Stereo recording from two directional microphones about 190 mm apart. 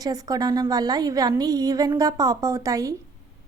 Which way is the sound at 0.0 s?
20° right (ahead or behind).